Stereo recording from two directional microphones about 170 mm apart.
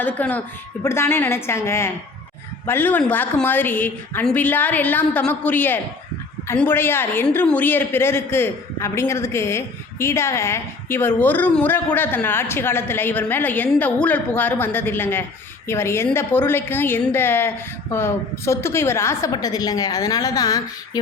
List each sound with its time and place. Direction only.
0.0 s a woman's voice: 10° left (ahead or behind)